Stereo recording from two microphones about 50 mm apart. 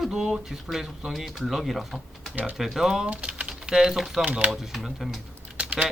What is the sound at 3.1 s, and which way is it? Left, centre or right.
Typing, right.